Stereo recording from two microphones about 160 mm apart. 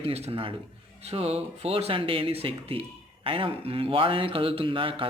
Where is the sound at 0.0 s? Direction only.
40° right (ahead or behind).